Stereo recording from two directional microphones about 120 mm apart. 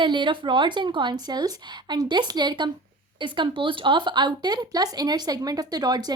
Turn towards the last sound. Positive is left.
turn(degrees=-35)  # may be behind; listen again after turning